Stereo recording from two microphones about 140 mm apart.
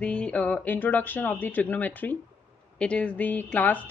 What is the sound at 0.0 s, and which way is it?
A woman's voice, 10° left (ahead or behind).